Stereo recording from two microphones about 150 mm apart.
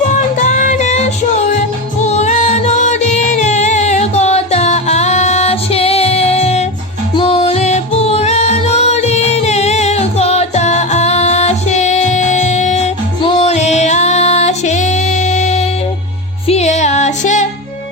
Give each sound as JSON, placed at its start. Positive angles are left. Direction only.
{"t": 0.1, "sound": "music", "side_deg": 55}